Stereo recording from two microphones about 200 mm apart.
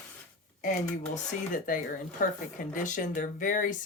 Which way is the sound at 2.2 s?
40° left (ahead or behind).